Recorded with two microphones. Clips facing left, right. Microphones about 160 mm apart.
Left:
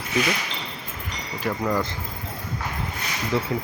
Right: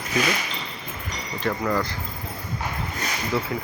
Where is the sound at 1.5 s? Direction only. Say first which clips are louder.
Even; 10° left (ahead or behind).